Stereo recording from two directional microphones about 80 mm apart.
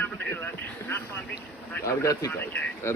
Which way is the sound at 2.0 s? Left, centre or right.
Left.